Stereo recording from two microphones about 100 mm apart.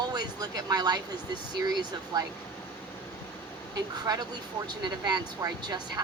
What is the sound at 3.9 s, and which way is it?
A woman's voice, 40° right (ahead or behind).